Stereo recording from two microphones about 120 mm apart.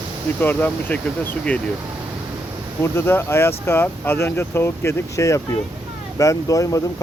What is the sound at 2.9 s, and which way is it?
Speech, 20° left (ahead or behind).